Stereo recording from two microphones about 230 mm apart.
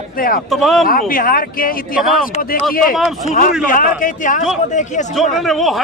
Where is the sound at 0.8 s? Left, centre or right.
Left.